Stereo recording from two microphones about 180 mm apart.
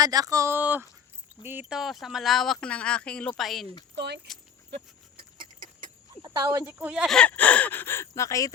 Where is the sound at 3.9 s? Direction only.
70° right (ahead or behind).